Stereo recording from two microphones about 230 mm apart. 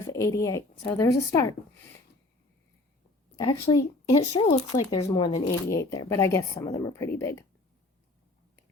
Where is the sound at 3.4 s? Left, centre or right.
Left.